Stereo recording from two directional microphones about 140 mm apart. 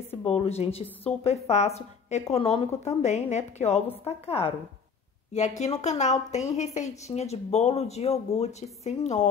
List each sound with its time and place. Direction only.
0.1 s a woman's voice: 45° left (ahead or behind)
5.6 s a woman's voice: 55° left (ahead or behind)